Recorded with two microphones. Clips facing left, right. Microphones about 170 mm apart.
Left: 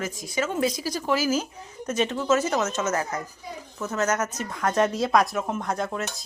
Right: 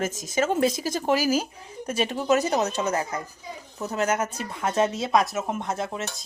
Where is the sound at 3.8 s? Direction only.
35° right (ahead or behind).